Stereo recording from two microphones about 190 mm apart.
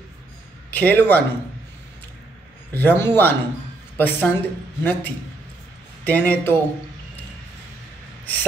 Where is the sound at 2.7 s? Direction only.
10° left (ahead or behind).